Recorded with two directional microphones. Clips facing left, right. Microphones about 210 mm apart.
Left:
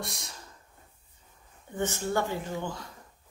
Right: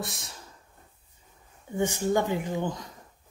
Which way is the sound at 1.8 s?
15° right (ahead or behind).